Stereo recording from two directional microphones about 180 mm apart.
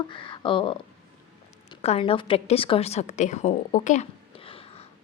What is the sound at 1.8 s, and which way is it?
A woman's voice, 35° left (ahead or behind).